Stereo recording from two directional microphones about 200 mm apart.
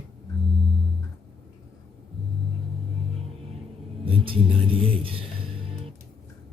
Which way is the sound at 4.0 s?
25° right (ahead or behind).